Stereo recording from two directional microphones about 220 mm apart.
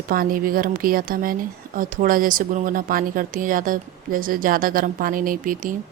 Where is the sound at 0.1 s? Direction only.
40° right (ahead or behind).